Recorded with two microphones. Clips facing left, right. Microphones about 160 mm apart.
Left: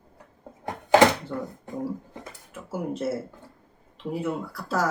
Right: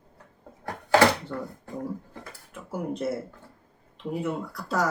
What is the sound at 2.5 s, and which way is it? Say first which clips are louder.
Speech: left 1 dB; 5° left (ahead or behind).